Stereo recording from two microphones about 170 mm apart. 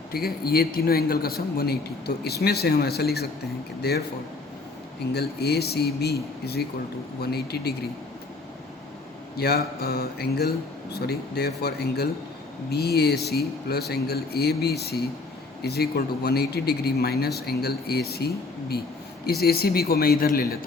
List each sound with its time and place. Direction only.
0.1 s a man's voice: 65° left (ahead or behind)
5.1 s speech: 70° left (ahead or behind)
9.3 s a man's voice: 65° left (ahead or behind)